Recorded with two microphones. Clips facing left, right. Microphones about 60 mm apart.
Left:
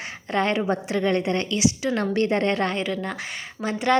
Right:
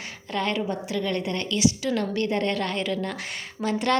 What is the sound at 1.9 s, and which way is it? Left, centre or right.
Speech, left.